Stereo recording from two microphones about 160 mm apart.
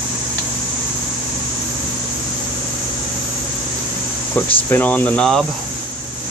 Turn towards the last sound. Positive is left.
turn(degrees=5)  # may be behind; listen again after turning